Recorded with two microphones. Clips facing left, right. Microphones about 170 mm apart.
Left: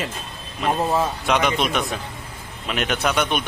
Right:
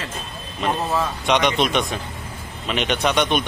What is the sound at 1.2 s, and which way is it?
Speech, 5° left (ahead or behind).